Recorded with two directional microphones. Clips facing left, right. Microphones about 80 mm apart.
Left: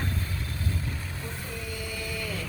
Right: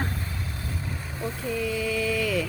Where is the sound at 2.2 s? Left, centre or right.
Right.